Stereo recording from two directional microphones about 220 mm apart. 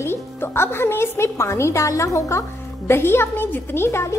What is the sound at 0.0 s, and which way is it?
A woman's voice, 10° left (ahead or behind).